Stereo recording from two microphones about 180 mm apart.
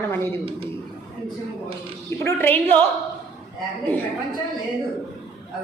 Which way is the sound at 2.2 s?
10° left (ahead or behind).